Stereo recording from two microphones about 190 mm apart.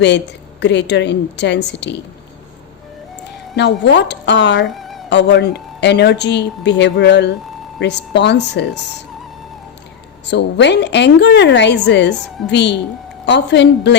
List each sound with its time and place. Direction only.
0.6 s speech: 65° left (ahead or behind)
3.5 s speech: 65° left (ahead or behind)
4.6 s music: centre (ahead or behind)
5.0 s speech: 65° left (ahead or behind)
10.2 s speech: 65° left (ahead or behind)